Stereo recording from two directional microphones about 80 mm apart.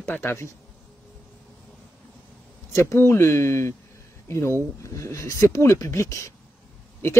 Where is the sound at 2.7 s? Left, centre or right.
Left.